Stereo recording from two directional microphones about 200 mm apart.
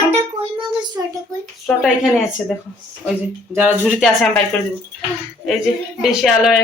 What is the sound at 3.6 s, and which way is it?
Speech, 5° right (ahead or behind).